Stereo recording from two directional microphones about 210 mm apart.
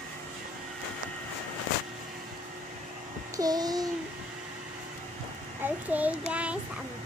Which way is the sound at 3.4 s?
20° right (ahead or behind).